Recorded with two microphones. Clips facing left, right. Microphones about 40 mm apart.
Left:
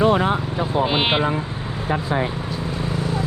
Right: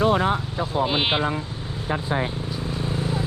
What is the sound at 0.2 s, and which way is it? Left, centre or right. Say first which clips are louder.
Vehicle: left 2 dB; left.